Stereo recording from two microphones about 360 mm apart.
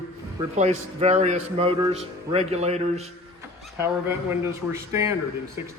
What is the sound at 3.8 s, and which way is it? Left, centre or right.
A man's voice, centre.